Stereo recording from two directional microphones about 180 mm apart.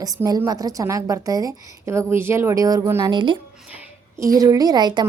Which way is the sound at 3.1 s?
25° right (ahead or behind).